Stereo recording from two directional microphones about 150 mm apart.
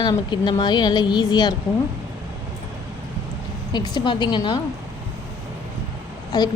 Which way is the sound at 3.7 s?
30° left (ahead or behind).